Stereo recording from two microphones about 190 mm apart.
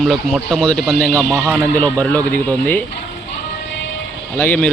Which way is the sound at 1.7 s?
10° left (ahead or behind).